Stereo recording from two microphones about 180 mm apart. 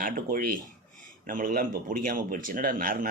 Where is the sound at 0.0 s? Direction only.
50° right (ahead or behind).